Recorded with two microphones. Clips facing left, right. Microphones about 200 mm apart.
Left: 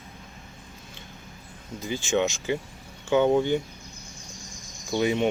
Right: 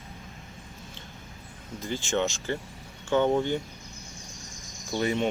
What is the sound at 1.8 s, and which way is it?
Speech, 10° left (ahead or behind).